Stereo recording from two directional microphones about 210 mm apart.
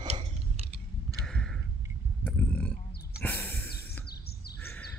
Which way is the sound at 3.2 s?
10° left (ahead or behind).